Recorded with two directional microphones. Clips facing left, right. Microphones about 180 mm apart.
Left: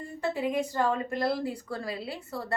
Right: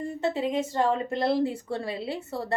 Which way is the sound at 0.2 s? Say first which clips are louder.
Right 1 dB; 25° right (ahead or behind).